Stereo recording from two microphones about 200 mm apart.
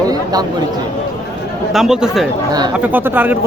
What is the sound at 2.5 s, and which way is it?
Speech, 20° right (ahead or behind).